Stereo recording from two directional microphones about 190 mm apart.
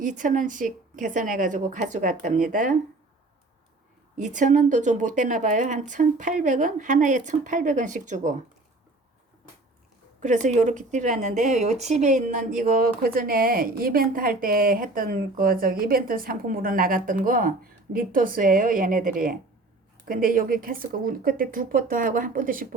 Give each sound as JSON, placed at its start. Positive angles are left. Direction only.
{"t": 0.0, "sound": "a woman's voice", "side_deg": -40}
{"t": 4.2, "sound": "a woman's voice", "side_deg": -40}
{"t": 10.2, "sound": "a woman's voice", "side_deg": -40}